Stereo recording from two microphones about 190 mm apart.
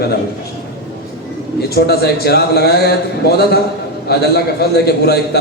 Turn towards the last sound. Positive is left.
turn(degrees=55)  # may be behind; listen again after turning